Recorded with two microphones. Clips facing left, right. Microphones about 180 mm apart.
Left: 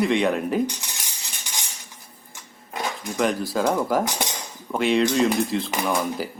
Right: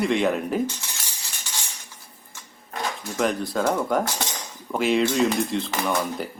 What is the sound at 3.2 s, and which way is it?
Speech, centre (ahead or behind).